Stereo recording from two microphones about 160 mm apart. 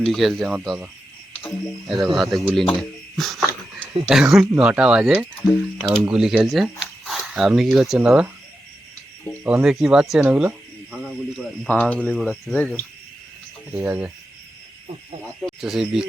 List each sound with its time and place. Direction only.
0.0 s speech: centre (ahead or behind)
9.4 s speech: 5° right (ahead or behind)
11.7 s speech: 10° left (ahead or behind)
12.1 s speech: 5° right (ahead or behind)
12.5 s speech: 5° left (ahead or behind)
13.7 s speech: 10° right (ahead or behind)
15.2 s speech: centre (ahead or behind)